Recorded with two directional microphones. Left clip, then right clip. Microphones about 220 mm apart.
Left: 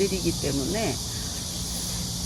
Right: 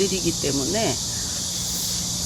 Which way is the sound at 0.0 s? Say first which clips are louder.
Right 3 dB; 20° right (ahead or behind).